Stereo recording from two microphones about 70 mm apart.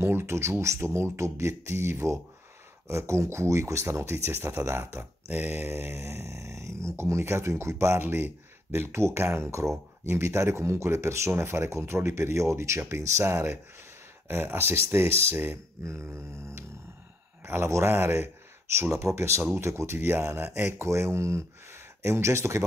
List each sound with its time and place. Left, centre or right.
0.0 s speech: right
5.3 s mantra: right
5.7 s speech: right
14.2 s speech: right